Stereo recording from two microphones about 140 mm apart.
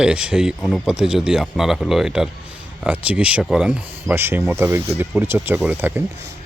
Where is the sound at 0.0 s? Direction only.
5° right (ahead or behind).